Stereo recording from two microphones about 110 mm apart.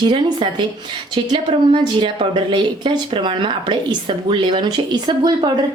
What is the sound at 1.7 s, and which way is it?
A woman's voice, 50° right (ahead or behind).